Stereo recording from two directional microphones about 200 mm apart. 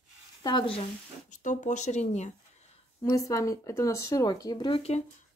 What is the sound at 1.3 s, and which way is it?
Speech, 40° left (ahead or behind).